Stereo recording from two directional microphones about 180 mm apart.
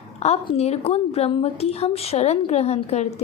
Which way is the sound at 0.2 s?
35° left (ahead or behind).